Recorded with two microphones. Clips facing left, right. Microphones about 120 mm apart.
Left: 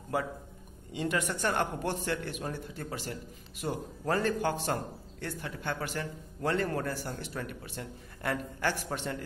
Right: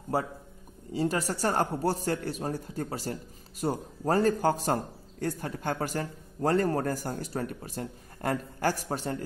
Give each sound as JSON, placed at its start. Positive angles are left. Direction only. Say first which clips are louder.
{"t": 0.1, "sound": "speech", "louder": "right 2 dB", "side_deg": -35}